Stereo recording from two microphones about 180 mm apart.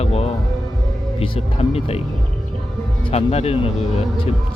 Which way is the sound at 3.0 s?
35° left (ahead or behind).